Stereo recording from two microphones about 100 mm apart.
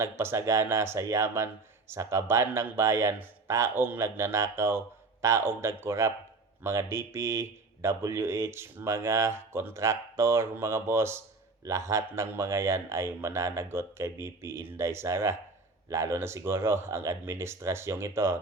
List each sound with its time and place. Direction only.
0.0 s speech: 25° right (ahead or behind)